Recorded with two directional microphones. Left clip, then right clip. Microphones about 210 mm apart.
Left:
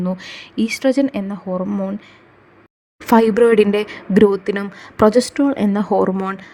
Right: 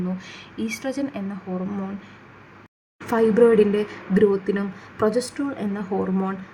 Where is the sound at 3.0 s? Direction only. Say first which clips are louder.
Left 4 dB; 45° left (ahead or behind).